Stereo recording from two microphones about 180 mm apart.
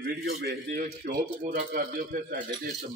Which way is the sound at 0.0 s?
70° right (ahead or behind).